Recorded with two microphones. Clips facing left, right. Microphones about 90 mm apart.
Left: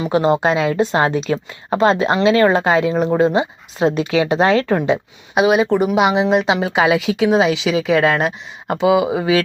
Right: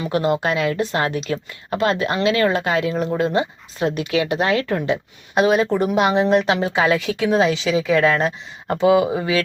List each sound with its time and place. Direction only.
0.0 s speech: 25° left (ahead or behind)
2.9 s speech: 40° left (ahead or behind)
3.2 s speech: 25° left (ahead or behind)
5.3 s speech: 10° left (ahead or behind)